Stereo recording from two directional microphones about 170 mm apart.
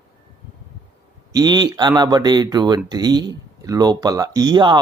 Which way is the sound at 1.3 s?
25° right (ahead or behind).